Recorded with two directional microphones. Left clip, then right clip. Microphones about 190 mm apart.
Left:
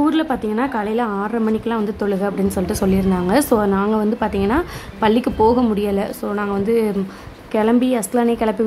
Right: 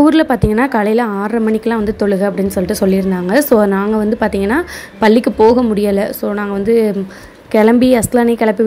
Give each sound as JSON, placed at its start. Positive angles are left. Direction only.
{"t": 0.0, "sound": "a woman's voice", "side_deg": -30}